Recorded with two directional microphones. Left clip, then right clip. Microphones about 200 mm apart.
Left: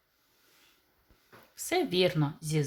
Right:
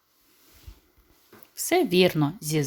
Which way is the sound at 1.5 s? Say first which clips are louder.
Right 7 dB; 25° right (ahead or behind).